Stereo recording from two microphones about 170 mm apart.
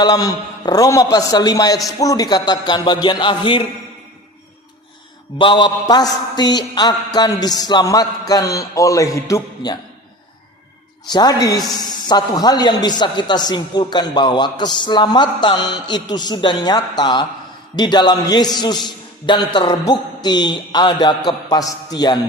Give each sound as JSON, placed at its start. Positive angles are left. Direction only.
{"t": 0.0, "sound": "a man's voice", "side_deg": 20}
{"t": 5.4, "sound": "a man's voice", "side_deg": 30}
{"t": 11.1, "sound": "a man's voice", "side_deg": 25}